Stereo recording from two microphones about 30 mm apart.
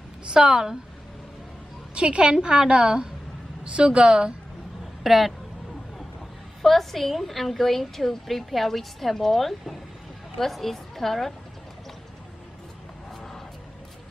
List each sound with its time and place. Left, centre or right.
0.3 s a woman's voice: right
2.0 s a woman's voice: right
5.0 s speech: centre
6.6 s a woman's voice: centre
13.1 s a sound: centre